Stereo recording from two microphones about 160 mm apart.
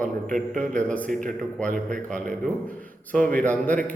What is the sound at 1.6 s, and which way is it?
Speech, 55° right (ahead or behind).